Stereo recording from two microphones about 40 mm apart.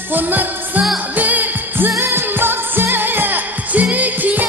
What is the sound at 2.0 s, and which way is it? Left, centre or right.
Music, right.